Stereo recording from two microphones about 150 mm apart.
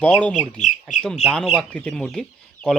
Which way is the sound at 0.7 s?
55° left (ahead or behind).